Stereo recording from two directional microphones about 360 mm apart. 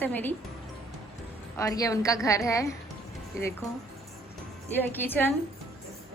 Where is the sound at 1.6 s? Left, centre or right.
Centre.